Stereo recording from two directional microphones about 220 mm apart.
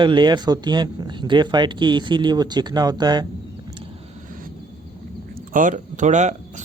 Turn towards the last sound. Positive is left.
turn(degrees=-35)  # may be behind; listen again after turning